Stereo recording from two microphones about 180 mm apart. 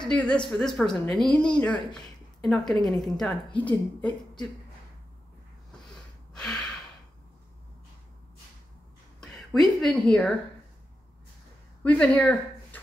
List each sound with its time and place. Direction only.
0.0 s a woman's voice: 5° left (ahead or behind)
6.3 s gasp: 5° left (ahead or behind)
9.2 s a woman's voice: centre (ahead or behind)
11.8 s speech: 10° left (ahead or behind)